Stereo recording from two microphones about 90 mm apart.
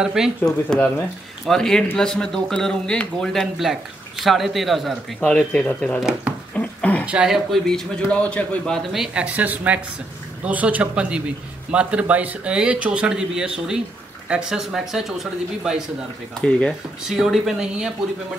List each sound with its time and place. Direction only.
0.0 s a man's voice: 5° right (ahead or behind)
0.7 s speech: 20° left (ahead or behind)
1.4 s a man's voice: 5° left (ahead or behind)
4.2 s a man's voice: centre (ahead or behind)
6.5 s a sound: 15° left (ahead or behind)
7.1 s a man's voice: 10° right (ahead or behind); by 8.8 s 10° left (ahead or behind)
8.9 s speech: 5° right (ahead or behind)
16.3 s a man's voice: 10° left (ahead or behind)
17.1 s a man's voice: 5° right (ahead or behind)